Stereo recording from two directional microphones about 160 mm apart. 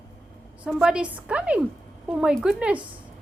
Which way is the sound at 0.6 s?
5° right (ahead or behind).